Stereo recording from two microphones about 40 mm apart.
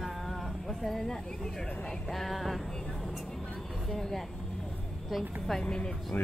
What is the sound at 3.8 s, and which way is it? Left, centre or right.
Speech, centre.